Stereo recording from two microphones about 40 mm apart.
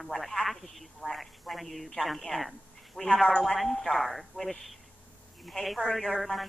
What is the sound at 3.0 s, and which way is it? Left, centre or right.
Speech, centre.